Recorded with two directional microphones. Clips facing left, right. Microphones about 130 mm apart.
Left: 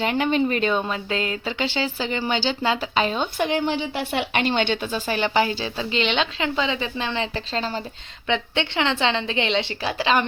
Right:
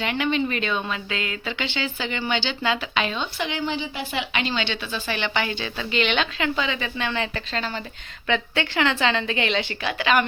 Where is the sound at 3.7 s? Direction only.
60° left (ahead or behind); by 7.8 s 35° left (ahead or behind).